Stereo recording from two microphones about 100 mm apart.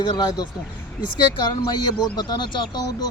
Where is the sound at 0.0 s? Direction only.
45° left (ahead or behind).